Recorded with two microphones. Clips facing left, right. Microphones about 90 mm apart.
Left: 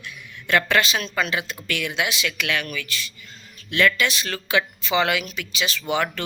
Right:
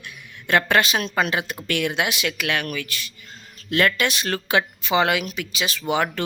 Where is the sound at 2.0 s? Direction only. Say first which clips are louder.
Right 1 dB; 50° right (ahead or behind).